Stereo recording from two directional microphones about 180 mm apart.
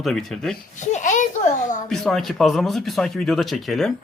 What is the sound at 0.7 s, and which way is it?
A child's voice, 45° left (ahead or behind).